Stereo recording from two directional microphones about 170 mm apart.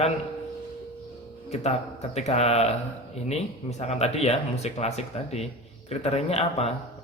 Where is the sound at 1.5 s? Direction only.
40° left (ahead or behind).